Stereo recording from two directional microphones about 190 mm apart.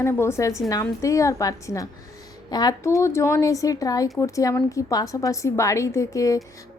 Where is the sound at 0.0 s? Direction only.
15° left (ahead or behind).